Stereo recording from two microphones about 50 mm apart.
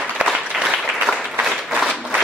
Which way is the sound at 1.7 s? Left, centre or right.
Centre.